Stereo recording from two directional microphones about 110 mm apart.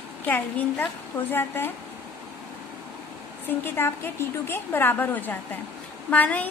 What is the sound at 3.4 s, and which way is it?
A woman's voice, 20° left (ahead or behind).